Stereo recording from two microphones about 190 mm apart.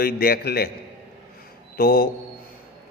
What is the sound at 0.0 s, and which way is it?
Speech, 55° left (ahead or behind).